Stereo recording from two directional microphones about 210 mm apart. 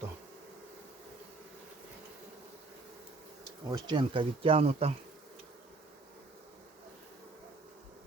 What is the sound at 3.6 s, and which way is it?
Speech, 20° right (ahead or behind).